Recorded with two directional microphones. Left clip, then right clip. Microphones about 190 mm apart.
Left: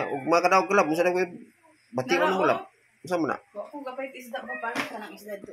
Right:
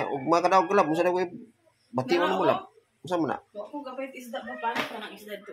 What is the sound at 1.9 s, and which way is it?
Speech, 15° right (ahead or behind).